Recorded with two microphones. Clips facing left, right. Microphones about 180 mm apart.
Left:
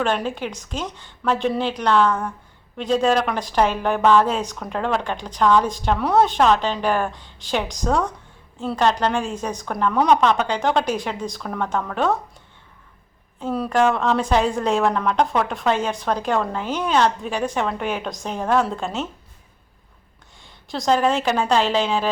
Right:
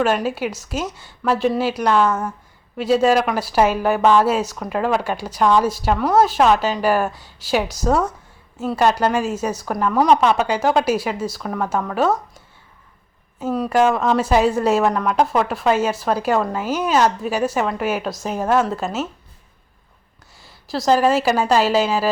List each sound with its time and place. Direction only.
0.0 s speech: 5° right (ahead or behind)
13.4 s a woman's voice: 5° right (ahead or behind)
20.4 s a woman's voice: 5° right (ahead or behind)